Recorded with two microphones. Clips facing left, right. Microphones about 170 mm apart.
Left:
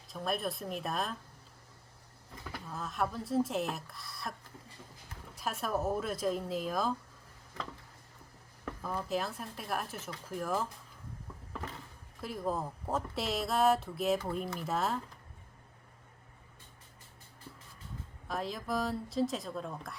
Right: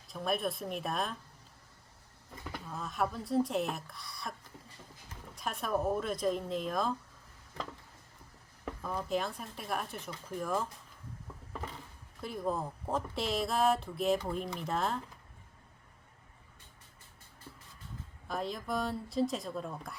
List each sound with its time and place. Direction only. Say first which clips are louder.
0.1 s speech: right 1 dB; centre (ahead or behind)
2.5 s speech: even; centre (ahead or behind)
8.8 s speech: right 1 dB; 5° left (ahead or behind)
12.2 s speech: even; centre (ahead or behind)
18.3 s speech: even; centre (ahead or behind)